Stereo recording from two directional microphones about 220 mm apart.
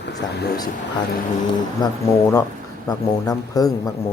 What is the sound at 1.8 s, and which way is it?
A man's voice, 20° left (ahead or behind).